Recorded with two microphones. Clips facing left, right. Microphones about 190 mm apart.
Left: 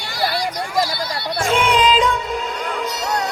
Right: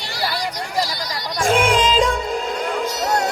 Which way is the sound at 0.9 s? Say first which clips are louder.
Left 3 dB; 40° right (ahead or behind).